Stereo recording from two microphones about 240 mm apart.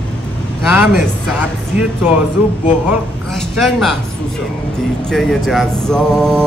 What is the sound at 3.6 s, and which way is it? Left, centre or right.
Speech, centre.